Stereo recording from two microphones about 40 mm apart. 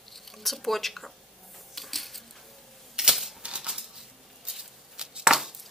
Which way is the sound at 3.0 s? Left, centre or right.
Centre.